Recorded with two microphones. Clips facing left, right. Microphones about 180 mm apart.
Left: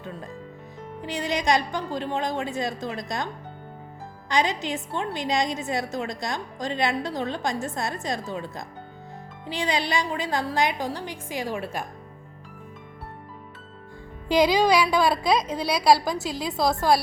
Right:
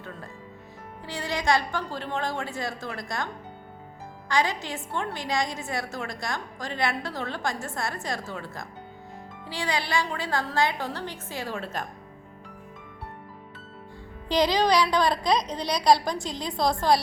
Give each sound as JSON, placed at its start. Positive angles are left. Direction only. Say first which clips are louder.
{"t": 0.0, "sound": "a woman's voice", "louder": "left 4 dB", "side_deg": 15}
{"t": 4.3, "sound": "a woman's voice", "louder": "left 2 dB", "side_deg": 20}
{"t": 14.3, "sound": "a woman's voice", "louder": "left 3 dB", "side_deg": 10}